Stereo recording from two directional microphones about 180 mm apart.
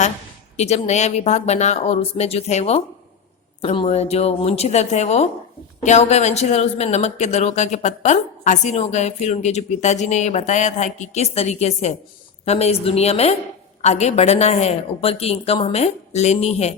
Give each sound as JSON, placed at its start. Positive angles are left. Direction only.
{"t": 0.5, "sound": "speech", "side_deg": 35}